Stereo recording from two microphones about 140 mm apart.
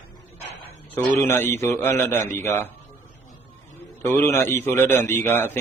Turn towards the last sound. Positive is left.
turn(degrees=15)  # may be behind; listen again after turning